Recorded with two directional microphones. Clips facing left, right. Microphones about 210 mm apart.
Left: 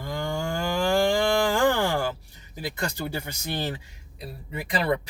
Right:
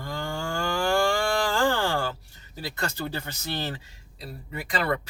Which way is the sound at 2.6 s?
15° left (ahead or behind).